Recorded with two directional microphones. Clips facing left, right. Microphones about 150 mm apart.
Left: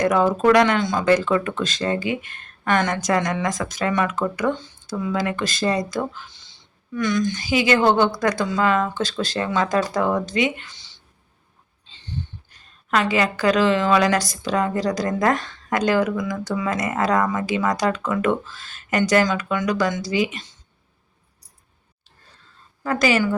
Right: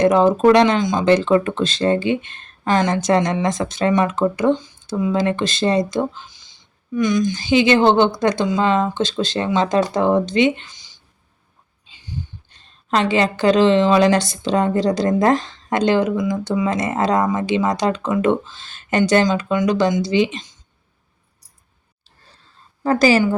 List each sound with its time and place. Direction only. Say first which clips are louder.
0.0 s speech: right 4 dB; 25° right (ahead or behind)
11.9 s a sound: right 1 dB; 10° right (ahead or behind)
12.5 s speech: right 3 dB; 25° right (ahead or behind)
22.8 s a woman's voice: right 5 dB; 30° right (ahead or behind)